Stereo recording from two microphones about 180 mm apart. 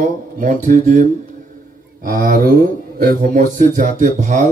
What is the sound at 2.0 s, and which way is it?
A man's voice, 50° right (ahead or behind).